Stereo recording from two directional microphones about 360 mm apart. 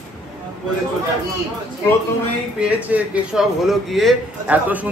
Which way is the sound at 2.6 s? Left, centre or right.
Centre.